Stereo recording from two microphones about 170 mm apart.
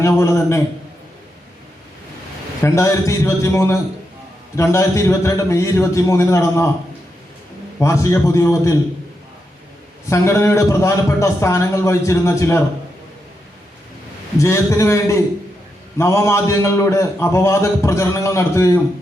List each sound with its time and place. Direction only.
0.0 s a man's voice: 15° left (ahead or behind)
2.6 s a man's voice: 15° left (ahead or behind)
7.8 s a man's voice: 15° left (ahead or behind)
10.1 s a man's voice: 15° left (ahead or behind)
14.3 s a man's voice: 15° left (ahead or behind)